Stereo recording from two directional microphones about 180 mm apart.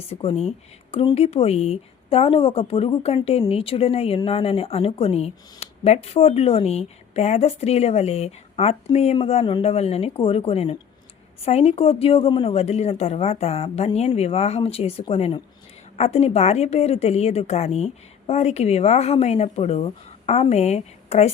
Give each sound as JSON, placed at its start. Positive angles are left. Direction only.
{"t": 0.1, "sound": "speech", "side_deg": 35}